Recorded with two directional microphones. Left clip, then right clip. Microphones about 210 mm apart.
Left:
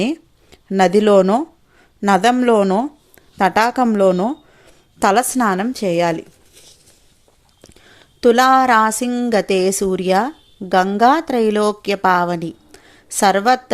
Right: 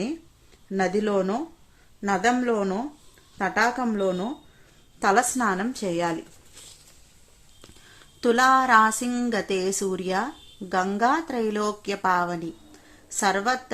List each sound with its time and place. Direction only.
0.7 s speech: 45° left (ahead or behind)
7.9 s speech: 30° left (ahead or behind)
9.0 s speech: 20° left (ahead or behind)
9.3 s speech: 30° left (ahead or behind)